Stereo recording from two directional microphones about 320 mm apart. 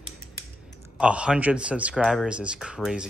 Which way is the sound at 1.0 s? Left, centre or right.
Centre.